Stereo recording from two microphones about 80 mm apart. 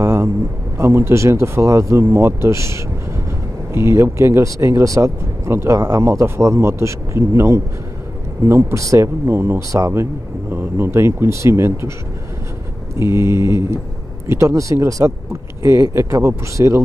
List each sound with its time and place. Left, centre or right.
0.0 s vehicle: right
0.7 s speech: right
5.8 s speech: right
9.3 s speech: right
10.5 s speech: right
13.0 s speech: right